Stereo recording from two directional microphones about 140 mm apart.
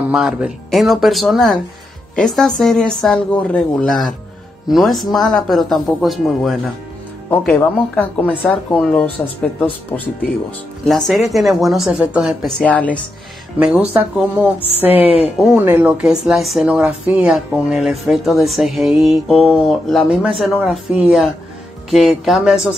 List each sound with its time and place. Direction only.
0.1 s speech: 5° right (ahead or behind)
7.2 s speech: 10° left (ahead or behind)
10.9 s speech: centre (ahead or behind)
13.6 s speech: 10° right (ahead or behind)
15.0 s speech: 45° left (ahead or behind)
15.3 s speech: 5° right (ahead or behind)